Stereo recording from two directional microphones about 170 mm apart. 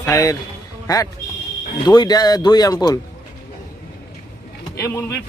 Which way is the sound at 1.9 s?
25° left (ahead or behind).